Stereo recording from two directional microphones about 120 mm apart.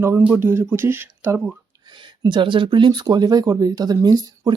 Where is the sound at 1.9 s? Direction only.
40° right (ahead or behind).